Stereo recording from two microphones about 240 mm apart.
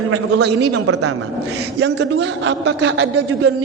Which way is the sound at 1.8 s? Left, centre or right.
Right.